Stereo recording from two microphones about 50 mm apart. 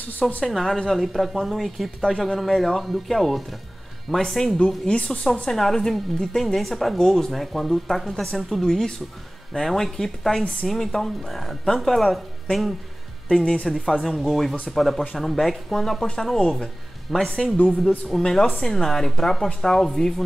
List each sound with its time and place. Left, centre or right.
0.5 s a woman's voice: centre
4.8 s speech: left
5.3 s a woman's voice: centre
13.3 s a woman's voice: centre
14.2 s a woman's voice: centre